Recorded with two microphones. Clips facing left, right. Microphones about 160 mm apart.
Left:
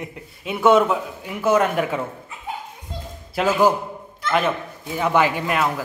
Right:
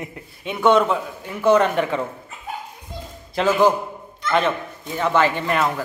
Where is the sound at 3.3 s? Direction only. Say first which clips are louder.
Right 1 dB; 10° left (ahead or behind).